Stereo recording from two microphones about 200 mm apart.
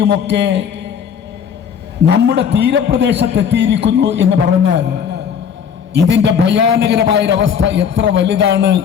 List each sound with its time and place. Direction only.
0.1 s a man's voice: 65° right (ahead or behind)
2.0 s a man's voice: 60° right (ahead or behind)